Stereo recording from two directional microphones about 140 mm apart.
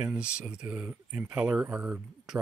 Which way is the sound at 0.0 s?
5° right (ahead or behind).